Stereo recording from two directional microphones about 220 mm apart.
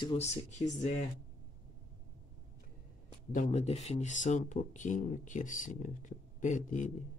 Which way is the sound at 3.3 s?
30° left (ahead or behind).